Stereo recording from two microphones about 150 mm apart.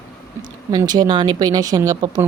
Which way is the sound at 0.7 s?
25° right (ahead or behind).